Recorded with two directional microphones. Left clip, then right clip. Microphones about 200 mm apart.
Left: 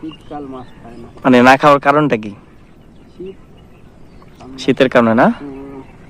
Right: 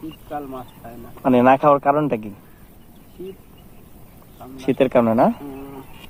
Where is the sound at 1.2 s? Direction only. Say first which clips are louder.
Left 6 dB; 20° left (ahead or behind).